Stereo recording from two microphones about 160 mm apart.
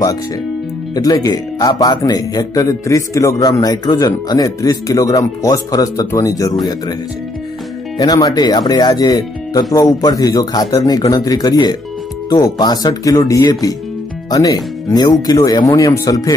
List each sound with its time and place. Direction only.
0.9 s speech: 25° left (ahead or behind)
8.0 s speech: 25° left (ahead or behind)